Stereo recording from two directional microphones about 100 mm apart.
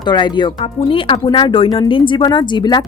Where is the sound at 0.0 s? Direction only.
50° left (ahead or behind).